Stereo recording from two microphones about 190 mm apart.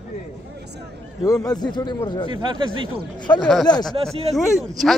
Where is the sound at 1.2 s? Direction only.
20° left (ahead or behind).